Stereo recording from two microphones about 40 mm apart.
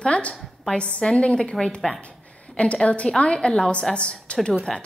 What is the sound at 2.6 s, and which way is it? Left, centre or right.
A woman's voice, left.